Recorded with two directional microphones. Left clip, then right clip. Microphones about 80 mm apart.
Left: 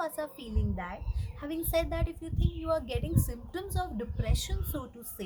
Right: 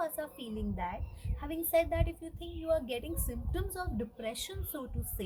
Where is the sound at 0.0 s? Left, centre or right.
Left.